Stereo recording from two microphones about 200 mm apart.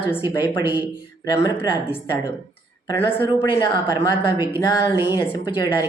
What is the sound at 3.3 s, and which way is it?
A woman's voice, 20° left (ahead or behind).